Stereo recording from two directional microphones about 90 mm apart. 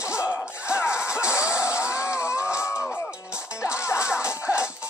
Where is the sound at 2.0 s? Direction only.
30° left (ahead or behind).